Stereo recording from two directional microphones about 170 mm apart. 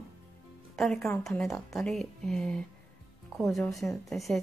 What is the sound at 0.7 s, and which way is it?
Speech, centre (ahead or behind).